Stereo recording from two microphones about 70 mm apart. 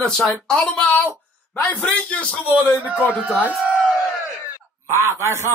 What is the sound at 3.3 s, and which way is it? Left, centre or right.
Speech, right.